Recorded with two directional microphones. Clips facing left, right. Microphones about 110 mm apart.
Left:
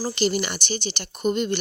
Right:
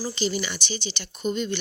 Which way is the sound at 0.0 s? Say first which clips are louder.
Left 4 dB; 60° left (ahead or behind).